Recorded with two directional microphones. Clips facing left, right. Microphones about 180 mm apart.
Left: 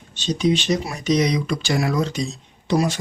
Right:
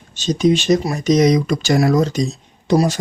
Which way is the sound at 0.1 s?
45° right (ahead or behind).